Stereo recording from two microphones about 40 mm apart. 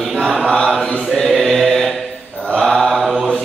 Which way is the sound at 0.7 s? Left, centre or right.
Centre.